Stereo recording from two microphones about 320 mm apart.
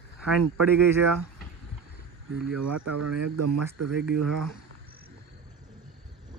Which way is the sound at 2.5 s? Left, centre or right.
Right.